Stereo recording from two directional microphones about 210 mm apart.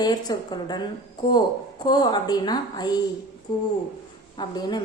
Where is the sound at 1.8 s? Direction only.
20° left (ahead or behind).